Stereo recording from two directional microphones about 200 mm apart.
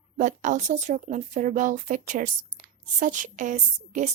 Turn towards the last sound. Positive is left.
turn(degrees=-40)  # may be behind; listen again after turning